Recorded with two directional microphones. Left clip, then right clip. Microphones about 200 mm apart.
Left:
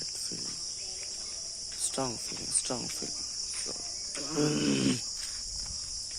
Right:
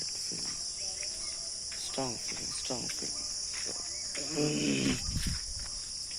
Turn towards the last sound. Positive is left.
turn(degrees=30)  # may be behind; listen again after turning